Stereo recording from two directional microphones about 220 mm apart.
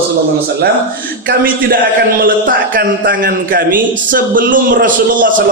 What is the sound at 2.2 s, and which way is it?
A man's voice, 40° right (ahead or behind).